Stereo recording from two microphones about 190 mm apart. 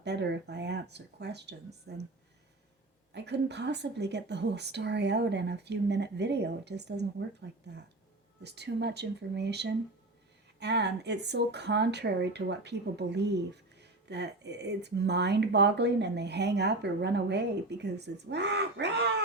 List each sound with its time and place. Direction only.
0.0 s speech: 65° right (ahead or behind)
3.1 s speech: 65° right (ahead or behind)
8.4 s speech: 60° right (ahead or behind)